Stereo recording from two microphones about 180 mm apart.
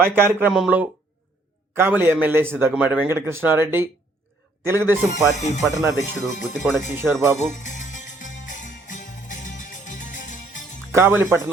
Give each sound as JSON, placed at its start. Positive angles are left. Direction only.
{"t": 0.0, "sound": "a man's voice", "side_deg": -10}
{"t": 5.1, "sound": "speech", "side_deg": 40}
{"t": 6.9, "sound": "a man's voice", "side_deg": -15}
{"t": 7.3, "sound": "jingle bell", "side_deg": 45}
{"t": 10.9, "sound": "a man's voice", "side_deg": -10}